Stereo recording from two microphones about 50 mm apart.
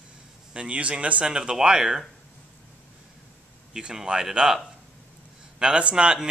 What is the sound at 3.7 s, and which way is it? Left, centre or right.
Speech, centre.